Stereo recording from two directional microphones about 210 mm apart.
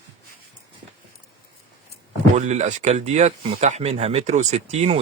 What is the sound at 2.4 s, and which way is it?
Speech, 35° right (ahead or behind).